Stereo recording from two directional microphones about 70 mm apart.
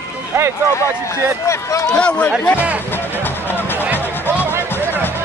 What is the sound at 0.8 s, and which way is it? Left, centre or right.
Speech, left.